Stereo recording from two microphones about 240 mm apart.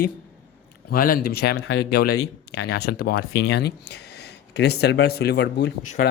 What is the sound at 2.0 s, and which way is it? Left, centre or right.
Speech, left.